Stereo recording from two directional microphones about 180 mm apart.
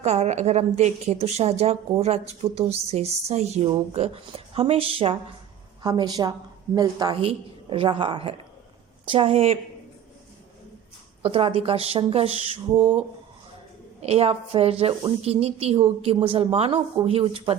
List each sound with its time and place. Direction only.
0.0 s a woman's voice: 40° right (ahead or behind)
11.2 s a woman's voice: 30° right (ahead or behind)
14.0 s a woman's voice: 35° right (ahead or behind)